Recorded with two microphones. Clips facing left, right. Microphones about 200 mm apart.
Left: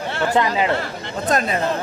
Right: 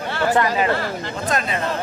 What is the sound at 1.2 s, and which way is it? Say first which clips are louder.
Speech: left 4 dB; 40° left (ahead or behind).